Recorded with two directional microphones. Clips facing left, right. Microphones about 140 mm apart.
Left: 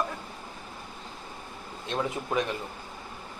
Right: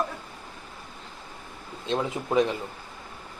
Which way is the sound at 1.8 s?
25° right (ahead or behind).